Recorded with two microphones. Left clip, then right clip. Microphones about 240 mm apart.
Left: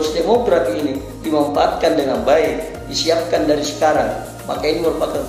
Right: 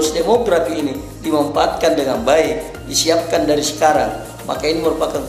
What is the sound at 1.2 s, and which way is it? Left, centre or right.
A man's voice, right.